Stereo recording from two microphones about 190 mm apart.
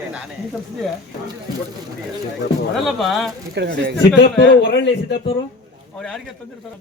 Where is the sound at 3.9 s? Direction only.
70° left (ahead or behind).